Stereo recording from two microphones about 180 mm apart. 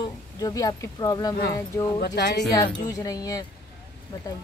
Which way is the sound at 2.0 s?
70° left (ahead or behind).